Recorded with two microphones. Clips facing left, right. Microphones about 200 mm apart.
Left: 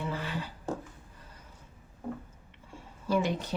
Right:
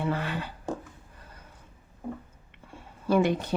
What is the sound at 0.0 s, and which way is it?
Speech, 65° right (ahead or behind).